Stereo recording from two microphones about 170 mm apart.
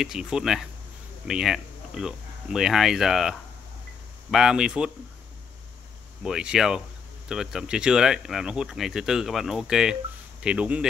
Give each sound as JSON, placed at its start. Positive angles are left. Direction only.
{"t": 0.0, "sound": "speech", "side_deg": -5}
{"t": 6.2, "sound": "speech", "side_deg": -5}